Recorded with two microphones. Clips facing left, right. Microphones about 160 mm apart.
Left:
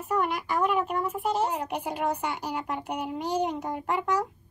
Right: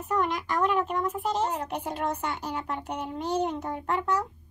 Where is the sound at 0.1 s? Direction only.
10° left (ahead or behind).